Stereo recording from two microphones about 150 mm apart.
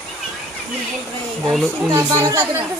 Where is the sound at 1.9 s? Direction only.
20° right (ahead or behind).